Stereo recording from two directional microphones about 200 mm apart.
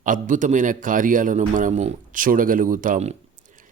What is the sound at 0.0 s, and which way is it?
A man's voice, 40° right (ahead or behind).